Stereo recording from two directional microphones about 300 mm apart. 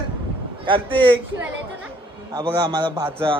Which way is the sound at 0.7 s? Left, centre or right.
Centre.